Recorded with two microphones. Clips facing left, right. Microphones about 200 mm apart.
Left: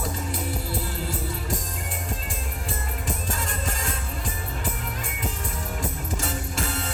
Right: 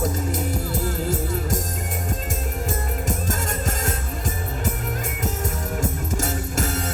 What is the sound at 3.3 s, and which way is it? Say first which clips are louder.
Music: right 4 dB; 45° right (ahead or behind).